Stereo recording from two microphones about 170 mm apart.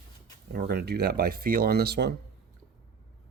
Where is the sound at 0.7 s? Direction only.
70° right (ahead or behind).